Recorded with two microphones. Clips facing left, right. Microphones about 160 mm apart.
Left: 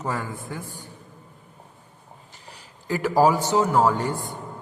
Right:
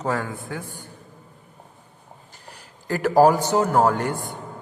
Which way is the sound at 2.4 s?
50° right (ahead or behind).